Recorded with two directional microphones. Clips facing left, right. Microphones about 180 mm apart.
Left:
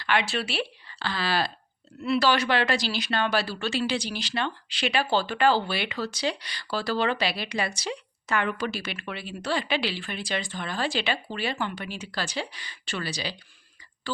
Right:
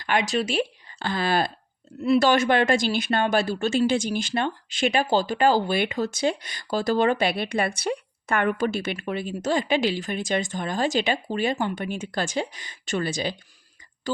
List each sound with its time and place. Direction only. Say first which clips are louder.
0.0 s speech: right 3 dB; 45° right (ahead or behind)